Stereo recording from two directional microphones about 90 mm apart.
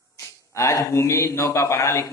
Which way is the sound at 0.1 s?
35° left (ahead or behind).